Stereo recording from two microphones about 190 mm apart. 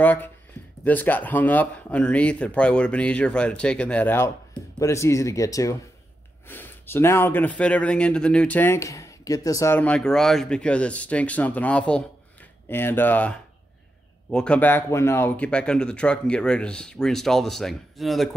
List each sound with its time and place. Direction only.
0.0 s speech: 10° left (ahead or behind)